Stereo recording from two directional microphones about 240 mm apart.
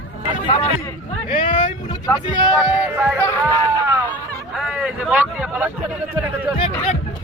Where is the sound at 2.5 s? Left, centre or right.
Centre.